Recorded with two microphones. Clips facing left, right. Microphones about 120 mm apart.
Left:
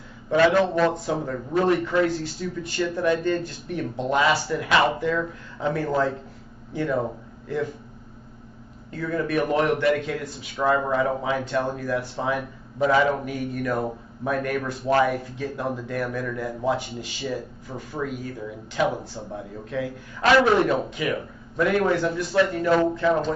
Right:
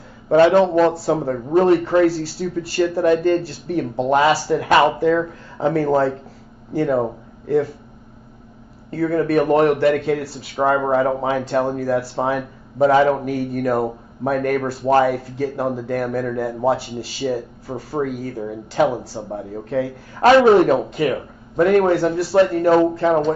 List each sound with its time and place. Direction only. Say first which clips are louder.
0.6 s a man's voice: right 6 dB; 35° right (ahead or behind)
8.9 s a man's voice: right 7 dB; 40° right (ahead or behind)